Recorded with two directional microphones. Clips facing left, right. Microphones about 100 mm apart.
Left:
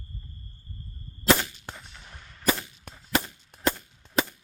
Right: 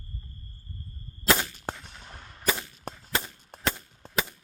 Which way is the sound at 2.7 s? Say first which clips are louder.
Right 8 dB; 45° right (ahead or behind).